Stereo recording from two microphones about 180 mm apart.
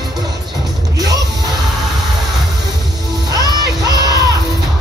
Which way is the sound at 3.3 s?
20° right (ahead or behind).